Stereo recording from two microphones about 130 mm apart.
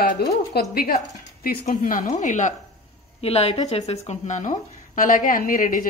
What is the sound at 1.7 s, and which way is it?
Speech, 90° left.